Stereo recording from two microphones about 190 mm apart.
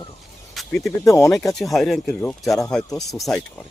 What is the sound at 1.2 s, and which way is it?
Speech, 5° left (ahead or behind).